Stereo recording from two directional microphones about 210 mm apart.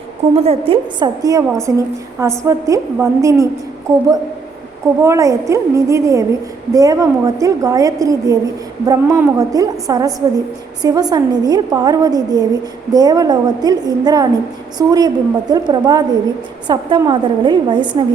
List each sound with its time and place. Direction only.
0.3 s a woman's voice: 30° right (ahead or behind)
5.0 s a woman's voice: 15° right (ahead or behind)